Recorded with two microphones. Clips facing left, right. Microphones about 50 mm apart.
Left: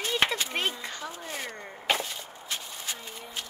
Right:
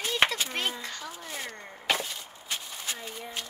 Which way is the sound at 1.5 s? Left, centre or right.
Centre.